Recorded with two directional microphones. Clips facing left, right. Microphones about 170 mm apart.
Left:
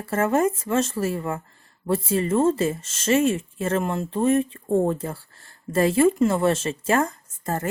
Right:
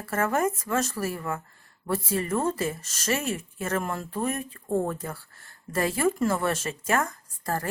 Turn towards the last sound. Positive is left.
turn(degrees=25)  # may be behind; listen again after turning